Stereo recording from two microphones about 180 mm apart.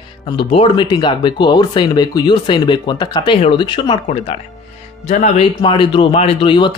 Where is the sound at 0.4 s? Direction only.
30° left (ahead or behind).